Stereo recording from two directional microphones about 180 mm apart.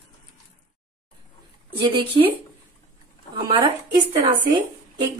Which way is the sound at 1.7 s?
30° right (ahead or behind).